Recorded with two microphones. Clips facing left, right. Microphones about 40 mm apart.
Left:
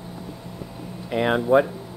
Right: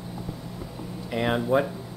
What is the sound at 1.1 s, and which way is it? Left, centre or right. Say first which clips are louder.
Speech: left 4 dB; centre.